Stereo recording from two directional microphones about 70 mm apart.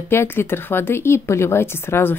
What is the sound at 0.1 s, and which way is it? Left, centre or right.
Speech, left.